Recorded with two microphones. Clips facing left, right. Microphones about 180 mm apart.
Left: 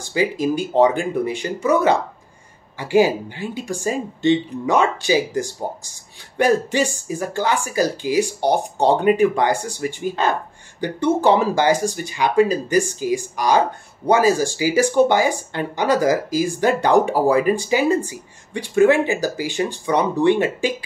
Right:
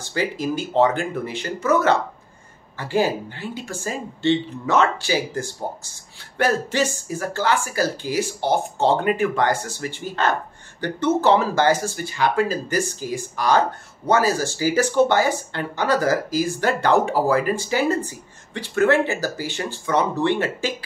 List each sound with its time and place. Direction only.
0.0 s speech: 15° left (ahead or behind)